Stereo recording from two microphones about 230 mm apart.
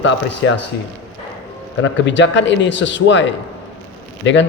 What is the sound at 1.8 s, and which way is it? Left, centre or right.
A man's voice, left.